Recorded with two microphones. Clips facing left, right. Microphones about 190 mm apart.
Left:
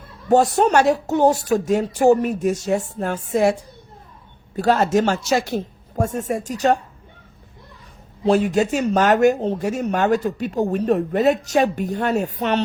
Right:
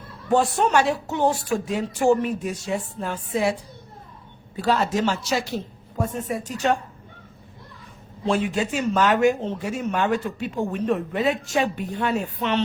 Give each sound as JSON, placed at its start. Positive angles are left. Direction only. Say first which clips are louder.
{"t": 0.3, "sound": "a woman's voice", "louder": "left 5 dB", "side_deg": 40}
{"t": 8.2, "sound": "speech", "louder": "left 6 dB", "side_deg": 40}